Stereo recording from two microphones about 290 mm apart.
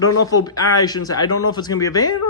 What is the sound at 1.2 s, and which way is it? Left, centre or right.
Speech, left.